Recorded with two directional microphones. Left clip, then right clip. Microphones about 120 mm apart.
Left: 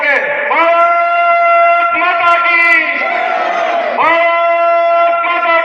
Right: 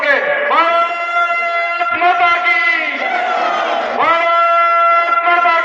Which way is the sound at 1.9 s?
40° right (ahead or behind).